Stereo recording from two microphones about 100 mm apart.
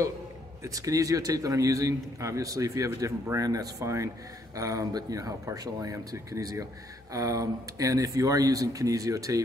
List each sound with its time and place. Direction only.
0.7 s speech: 35° right (ahead or behind)